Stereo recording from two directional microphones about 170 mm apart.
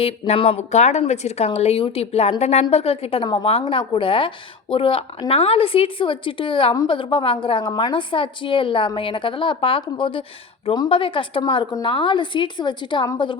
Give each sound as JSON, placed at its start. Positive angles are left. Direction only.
{"t": 0.0, "sound": "a woman's voice", "side_deg": 35}